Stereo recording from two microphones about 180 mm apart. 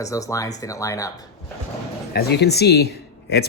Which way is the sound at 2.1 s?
65° left (ahead or behind).